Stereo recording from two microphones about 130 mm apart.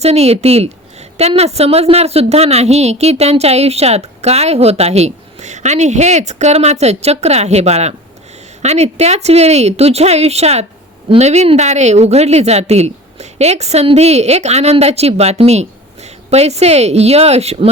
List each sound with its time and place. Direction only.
0.0 s a woman's voice: 55° right (ahead or behind)